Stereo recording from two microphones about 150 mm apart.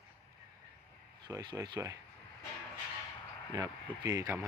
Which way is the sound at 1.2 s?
30° right (ahead or behind).